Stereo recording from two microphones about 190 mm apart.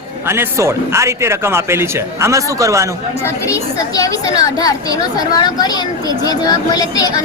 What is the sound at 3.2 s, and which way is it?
Speech, 15° left (ahead or behind).